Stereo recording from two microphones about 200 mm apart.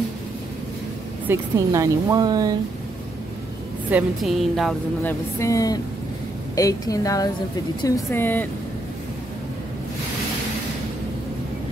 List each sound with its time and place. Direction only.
1.2 s speech: 15° right (ahead or behind)
3.9 s a woman's voice: centre (ahead or behind)
5.4 s a woman's voice: 15° left (ahead or behind)